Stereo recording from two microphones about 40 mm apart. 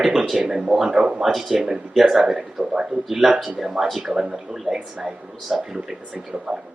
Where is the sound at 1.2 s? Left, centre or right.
Centre.